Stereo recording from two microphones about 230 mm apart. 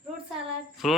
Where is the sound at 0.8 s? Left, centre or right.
Centre.